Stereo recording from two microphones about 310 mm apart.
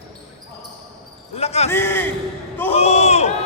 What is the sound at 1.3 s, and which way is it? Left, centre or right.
Basketball bounce, left.